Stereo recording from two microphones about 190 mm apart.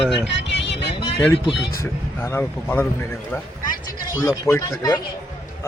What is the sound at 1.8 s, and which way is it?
Speech, 10° left (ahead or behind).